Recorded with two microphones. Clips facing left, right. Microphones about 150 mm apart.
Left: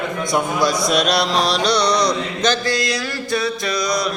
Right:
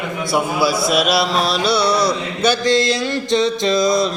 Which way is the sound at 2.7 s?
25° right (ahead or behind).